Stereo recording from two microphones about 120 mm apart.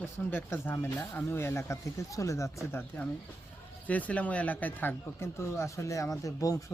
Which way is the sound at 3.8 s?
10° left (ahead or behind).